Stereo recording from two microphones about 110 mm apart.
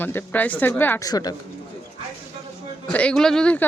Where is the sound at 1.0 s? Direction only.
35° left (ahead or behind).